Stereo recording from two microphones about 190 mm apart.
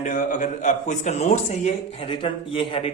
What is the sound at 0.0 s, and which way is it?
Speech, 40° left (ahead or behind).